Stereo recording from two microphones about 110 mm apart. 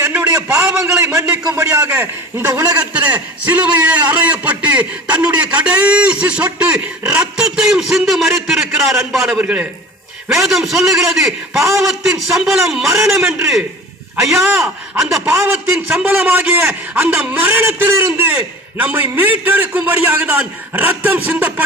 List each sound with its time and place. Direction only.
0.1 s a sound: 25° right (ahead or behind)
0.4 s a man's voice: 15° right (ahead or behind)
1.5 s a man's voice: 30° right (ahead or behind); by 13.3 s 5° right (ahead or behind)
15.3 s a man's voice: 15° right (ahead or behind)